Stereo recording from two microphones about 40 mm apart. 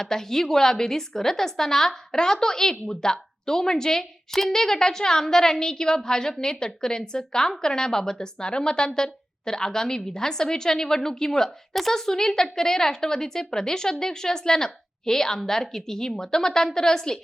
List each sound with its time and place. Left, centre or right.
0.0 s a woman's voice: centre